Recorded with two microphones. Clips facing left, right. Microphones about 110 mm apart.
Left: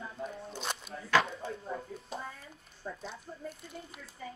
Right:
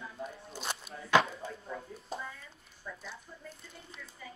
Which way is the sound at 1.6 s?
30° left (ahead or behind).